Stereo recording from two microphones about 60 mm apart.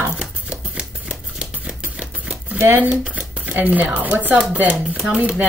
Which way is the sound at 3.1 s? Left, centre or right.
Right.